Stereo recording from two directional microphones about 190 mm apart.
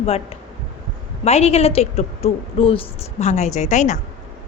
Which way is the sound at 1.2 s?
35° left (ahead or behind).